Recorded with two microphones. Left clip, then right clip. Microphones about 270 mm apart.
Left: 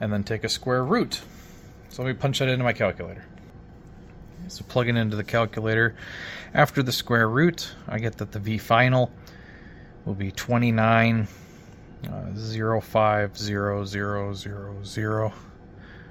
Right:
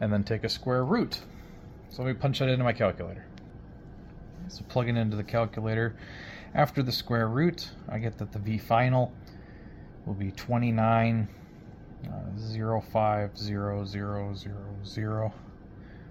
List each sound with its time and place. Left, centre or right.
0.0 s speech: centre
4.5 s speech: left
10.2 s speech: left